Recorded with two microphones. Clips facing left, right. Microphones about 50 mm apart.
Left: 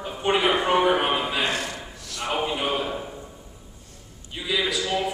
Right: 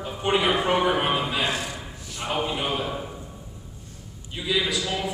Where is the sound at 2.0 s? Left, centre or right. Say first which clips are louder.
Left 3 dB; left.